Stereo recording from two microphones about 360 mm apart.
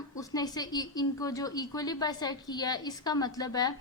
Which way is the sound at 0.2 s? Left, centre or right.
Centre.